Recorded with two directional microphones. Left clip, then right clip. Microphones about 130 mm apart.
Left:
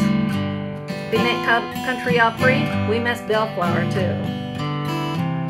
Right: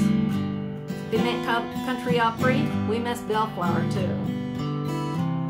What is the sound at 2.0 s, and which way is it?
Music, 30° left (ahead or behind).